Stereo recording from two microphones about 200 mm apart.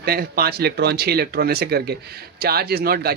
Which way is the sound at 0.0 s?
50° right (ahead or behind).